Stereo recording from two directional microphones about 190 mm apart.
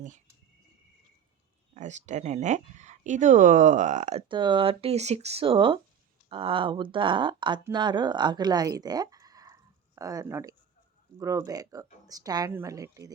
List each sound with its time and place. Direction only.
1.7 s speech: 40° right (ahead or behind)
4.3 s a woman's voice: 25° right (ahead or behind)